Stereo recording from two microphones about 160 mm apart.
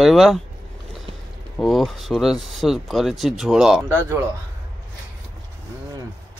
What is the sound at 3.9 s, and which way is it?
Speech, 20° right (ahead or behind).